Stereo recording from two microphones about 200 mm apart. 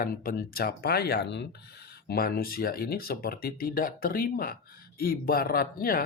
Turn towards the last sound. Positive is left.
turn(degrees=45)  # may be behind; listen again after turning